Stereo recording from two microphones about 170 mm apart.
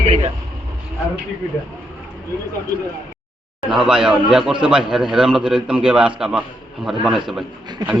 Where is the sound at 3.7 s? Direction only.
5° right (ahead or behind).